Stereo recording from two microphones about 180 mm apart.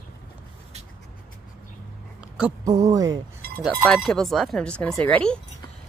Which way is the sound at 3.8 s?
5° left (ahead or behind).